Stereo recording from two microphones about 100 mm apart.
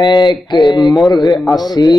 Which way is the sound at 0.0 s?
45° left (ahead or behind).